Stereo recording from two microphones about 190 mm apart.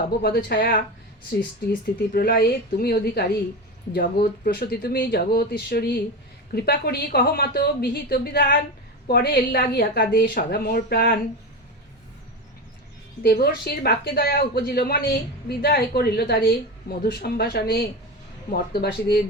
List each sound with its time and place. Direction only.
0.2 s a woman's voice: 55° left (ahead or behind)
2.1 s a woman's voice: 50° left (ahead or behind)
13.2 s a woman's voice: 55° left (ahead or behind)